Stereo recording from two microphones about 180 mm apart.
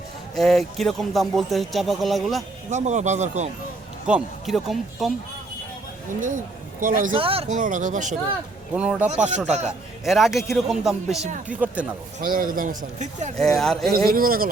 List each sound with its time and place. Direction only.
0.3 s speech: centre (ahead or behind)
2.6 s speech: 40° right (ahead or behind)
4.0 s speech: 5° right (ahead or behind)
6.1 s speech: 45° right (ahead or behind)
7.1 s speech: 30° right (ahead or behind)
7.5 s a man's voice: 45° right (ahead or behind)
8.7 s speech: 5° right (ahead or behind)
9.5 s speech: 40° right (ahead or behind)
10.0 s speech: centre (ahead or behind)
12.2 s a man's voice: 50° right (ahead or behind)
13.4 s speech: centre (ahead or behind)
13.9 s a man's voice: 55° right (ahead or behind)